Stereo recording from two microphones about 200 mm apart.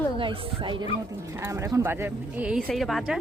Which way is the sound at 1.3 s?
15° right (ahead or behind).